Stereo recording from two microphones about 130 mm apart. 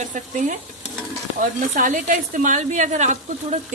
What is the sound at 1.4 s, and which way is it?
A woman's voice, 90° right.